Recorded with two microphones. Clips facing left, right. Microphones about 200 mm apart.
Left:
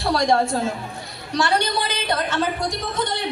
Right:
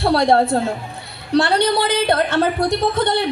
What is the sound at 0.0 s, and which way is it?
Speech, 60° right (ahead or behind).